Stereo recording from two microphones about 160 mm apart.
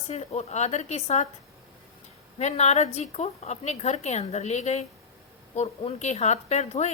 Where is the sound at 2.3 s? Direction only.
45° left (ahead or behind).